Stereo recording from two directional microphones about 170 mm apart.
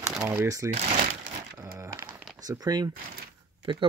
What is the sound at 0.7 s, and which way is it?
Speech, 40° right (ahead or behind).